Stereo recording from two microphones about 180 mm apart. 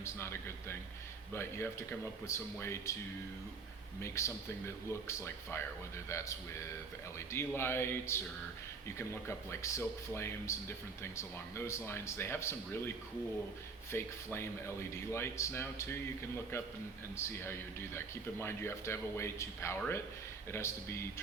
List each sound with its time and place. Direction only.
0.0 s speech: 15° left (ahead or behind)
4.0 s speech: 15° left (ahead or behind)
13.9 s speech: 15° left (ahead or behind)
17.2 s speech: 15° left (ahead or behind)